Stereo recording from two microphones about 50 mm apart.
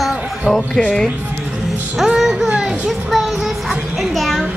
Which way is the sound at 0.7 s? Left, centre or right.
Centre.